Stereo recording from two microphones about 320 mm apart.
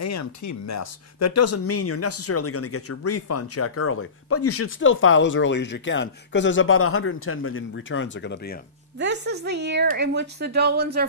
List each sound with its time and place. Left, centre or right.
0.0 s speech: left
8.9 s a woman's voice: right